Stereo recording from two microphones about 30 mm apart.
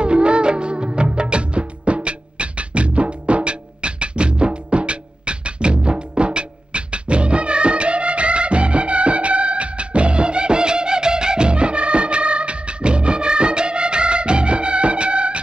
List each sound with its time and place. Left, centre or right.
0.0 s music: right